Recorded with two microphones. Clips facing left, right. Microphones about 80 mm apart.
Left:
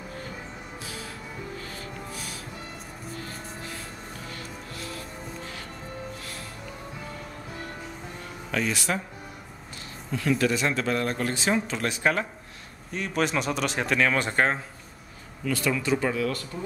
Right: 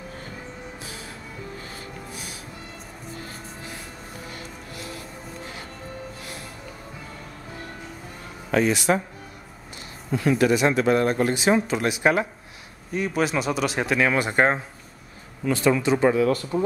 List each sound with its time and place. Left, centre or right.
8.5 s speech: right
10.1 s speech: right
12.9 s speech: centre; by 16.3 s right